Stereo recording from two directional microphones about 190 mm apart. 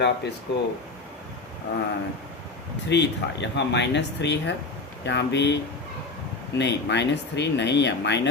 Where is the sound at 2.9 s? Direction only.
65° left (ahead or behind).